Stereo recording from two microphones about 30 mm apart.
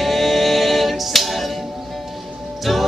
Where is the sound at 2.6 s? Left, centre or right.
Centre.